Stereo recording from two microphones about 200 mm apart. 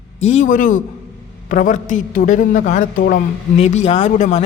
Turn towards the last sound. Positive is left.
turn(degrees=35)  # may be behind; listen again after turning